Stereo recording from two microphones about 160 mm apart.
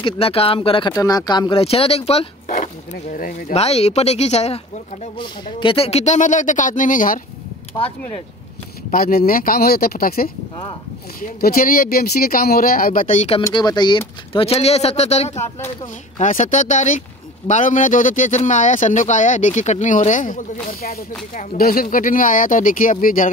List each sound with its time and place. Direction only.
0.0 s speech: 35° left (ahead or behind); by 3.5 s 60° left (ahead or behind)
3.5 s speech: 40° left (ahead or behind); by 7.2 s 55° left (ahead or behind)
8.9 s speech: 70° left (ahead or behind)
13.3 s speech: 25° left (ahead or behind); by 20.4 s 55° left (ahead or behind)
20.8 s speech: 70° left (ahead or behind)